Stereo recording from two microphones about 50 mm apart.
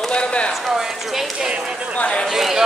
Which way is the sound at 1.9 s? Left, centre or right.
Left.